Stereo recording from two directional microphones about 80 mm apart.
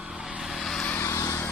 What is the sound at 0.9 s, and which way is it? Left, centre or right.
Vehicle, left.